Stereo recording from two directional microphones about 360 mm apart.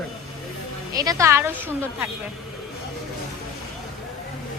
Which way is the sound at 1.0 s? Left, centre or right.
Centre.